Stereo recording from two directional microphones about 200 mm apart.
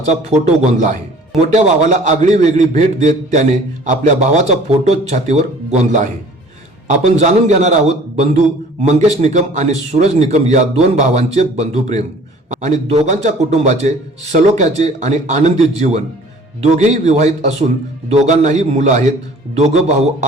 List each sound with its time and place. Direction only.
0.0 s a man's voice: 35° right (ahead or behind)
7.2 s a man's voice: 35° right (ahead or behind)